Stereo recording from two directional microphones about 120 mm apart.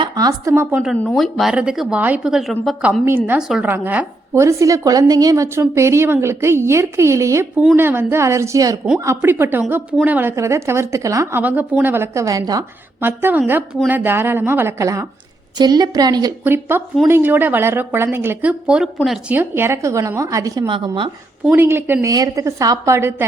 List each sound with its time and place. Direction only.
0.0 s speech: 30° right (ahead or behind)
1.1 s a woman's voice: centre (ahead or behind); by 12.6 s 30° right (ahead or behind)
13.0 s a woman's voice: 20° right (ahead or behind); by 16.3 s 35° right (ahead or behind)
16.4 s a woman's voice: 20° right (ahead or behind)
18.6 s a woman's voice: 10° right (ahead or behind)
19.3 s a woman's voice: 20° right (ahead or behind)
20.7 s speech: 45° right (ahead or behind)
21.5 s a woman's voice: 20° right (ahead or behind)
22.1 s a woman's voice: 30° right (ahead or behind)